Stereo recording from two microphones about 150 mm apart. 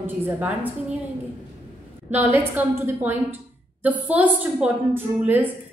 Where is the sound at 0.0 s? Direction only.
10° right (ahead or behind).